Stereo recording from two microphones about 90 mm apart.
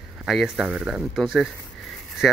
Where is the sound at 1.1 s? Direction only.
5° right (ahead or behind).